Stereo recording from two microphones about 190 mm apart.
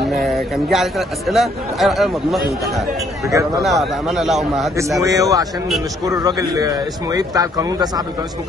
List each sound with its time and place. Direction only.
0.1 s a man's voice: centre (ahead or behind)
3.3 s speech: 15° right (ahead or behind)
3.6 s a man's voice: centre (ahead or behind)
5.0 s a man's voice: 15° right (ahead or behind)